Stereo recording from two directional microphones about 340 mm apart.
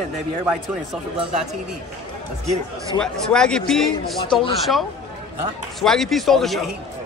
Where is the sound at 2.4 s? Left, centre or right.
Centre.